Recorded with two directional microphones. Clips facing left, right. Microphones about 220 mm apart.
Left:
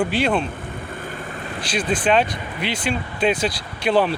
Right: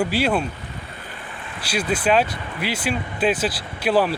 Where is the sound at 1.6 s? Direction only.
10° right (ahead or behind).